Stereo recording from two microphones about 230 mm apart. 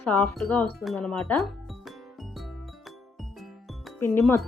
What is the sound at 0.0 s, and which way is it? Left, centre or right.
Speech, centre.